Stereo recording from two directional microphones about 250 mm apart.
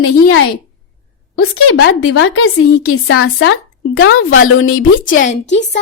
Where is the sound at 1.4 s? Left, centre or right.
Left.